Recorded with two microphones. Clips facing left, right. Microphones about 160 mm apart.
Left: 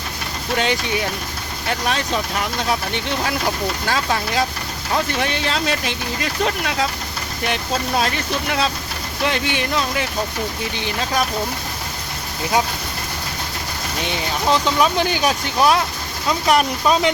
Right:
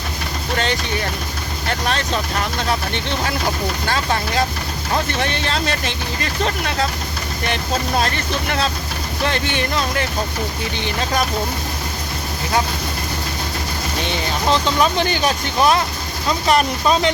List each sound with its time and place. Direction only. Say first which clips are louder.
0.5 s speech: left 2 dB; 10° left (ahead or behind)
14.1 s speech: even; 5° left (ahead or behind)